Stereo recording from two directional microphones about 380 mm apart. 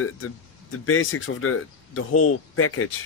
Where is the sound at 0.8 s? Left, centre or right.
Left.